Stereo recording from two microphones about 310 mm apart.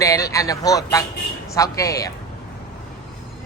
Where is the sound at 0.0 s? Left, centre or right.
Centre.